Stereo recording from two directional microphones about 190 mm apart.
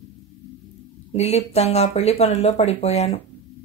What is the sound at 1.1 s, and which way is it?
Speech, 35° left (ahead or behind).